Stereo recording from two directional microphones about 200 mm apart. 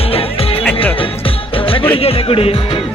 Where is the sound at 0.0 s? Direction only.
30° left (ahead or behind).